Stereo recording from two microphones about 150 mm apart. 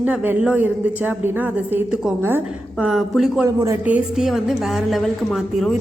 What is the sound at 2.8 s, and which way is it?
Speech, centre (ahead or behind).